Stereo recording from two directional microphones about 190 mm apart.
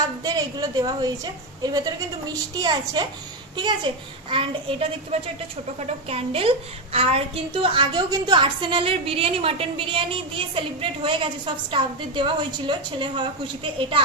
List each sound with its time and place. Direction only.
0.2 s a woman's voice: 20° right (ahead or behind)